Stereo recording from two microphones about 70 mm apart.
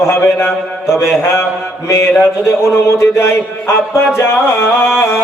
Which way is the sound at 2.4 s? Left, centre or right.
Left.